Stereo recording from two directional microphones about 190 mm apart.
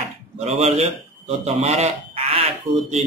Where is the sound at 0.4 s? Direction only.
35° right (ahead or behind).